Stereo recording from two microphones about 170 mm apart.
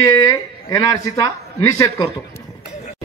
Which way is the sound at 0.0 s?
20° left (ahead or behind).